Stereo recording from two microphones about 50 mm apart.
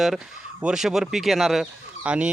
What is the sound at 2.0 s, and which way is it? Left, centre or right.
Speech, right.